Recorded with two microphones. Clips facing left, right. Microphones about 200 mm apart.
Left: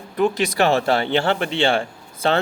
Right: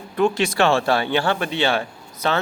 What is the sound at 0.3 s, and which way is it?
Speech, 15° left (ahead or behind).